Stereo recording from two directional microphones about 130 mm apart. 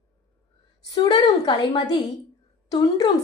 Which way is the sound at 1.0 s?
35° left (ahead or behind).